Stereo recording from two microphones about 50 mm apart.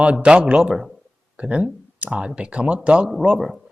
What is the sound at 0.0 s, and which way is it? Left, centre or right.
Speech, right.